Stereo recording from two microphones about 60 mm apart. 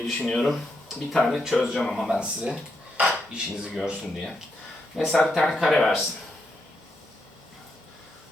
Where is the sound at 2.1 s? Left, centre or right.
Centre.